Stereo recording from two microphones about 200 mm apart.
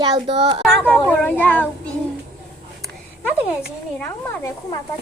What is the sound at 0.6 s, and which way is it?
A woman's voice, 5° left (ahead or behind).